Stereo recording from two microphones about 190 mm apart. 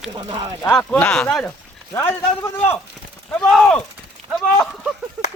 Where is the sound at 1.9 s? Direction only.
15° left (ahead or behind).